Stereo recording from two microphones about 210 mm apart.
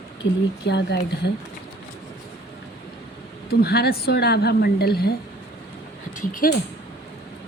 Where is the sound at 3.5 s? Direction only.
50° left (ahead or behind).